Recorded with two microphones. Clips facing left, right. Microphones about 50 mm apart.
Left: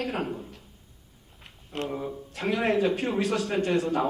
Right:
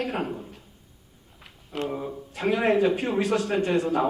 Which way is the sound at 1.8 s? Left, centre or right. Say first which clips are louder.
Right 2 dB; centre.